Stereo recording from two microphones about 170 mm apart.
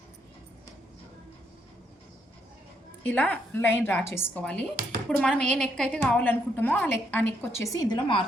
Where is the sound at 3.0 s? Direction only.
10° left (ahead or behind).